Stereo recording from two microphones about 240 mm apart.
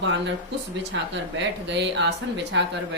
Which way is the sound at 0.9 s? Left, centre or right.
Right.